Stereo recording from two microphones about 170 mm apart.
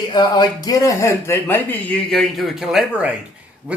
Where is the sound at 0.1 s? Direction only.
25° left (ahead or behind).